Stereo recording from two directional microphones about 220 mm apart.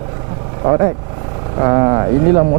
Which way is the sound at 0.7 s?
20° right (ahead or behind).